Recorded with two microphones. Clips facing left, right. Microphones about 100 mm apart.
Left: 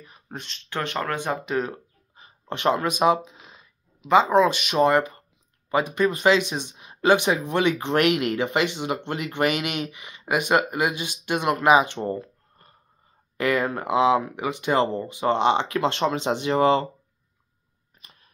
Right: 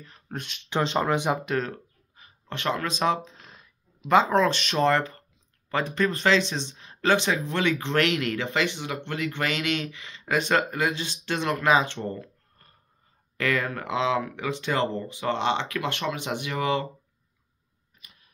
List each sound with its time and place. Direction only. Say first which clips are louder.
0.3 s speech: right 2 dB; centre (ahead or behind)
0.6 s speech: right 3 dB; 20° right (ahead or behind)
1.4 s speech: left 2 dB; 5° left (ahead or behind)
1.7 s speech: left 1 dB; 20° left (ahead or behind)